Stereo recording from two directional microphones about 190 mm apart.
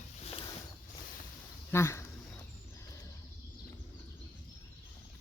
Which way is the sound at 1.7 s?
15° left (ahead or behind).